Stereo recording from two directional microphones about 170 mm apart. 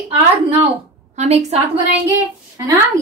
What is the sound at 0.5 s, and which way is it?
A woman's voice, 35° right (ahead or behind).